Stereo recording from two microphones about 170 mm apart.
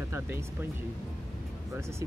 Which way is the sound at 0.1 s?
15° right (ahead or behind).